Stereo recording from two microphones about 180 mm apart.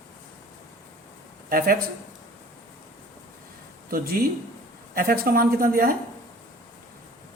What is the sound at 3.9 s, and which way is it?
Speech, 55° right (ahead or behind).